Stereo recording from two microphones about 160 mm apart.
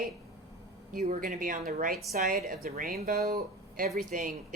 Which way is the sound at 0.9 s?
60° right (ahead or behind).